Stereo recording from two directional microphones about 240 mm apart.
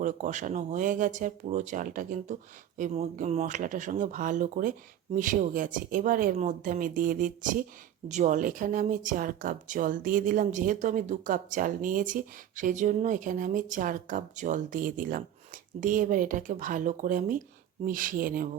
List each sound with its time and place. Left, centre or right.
0.0 s speech: right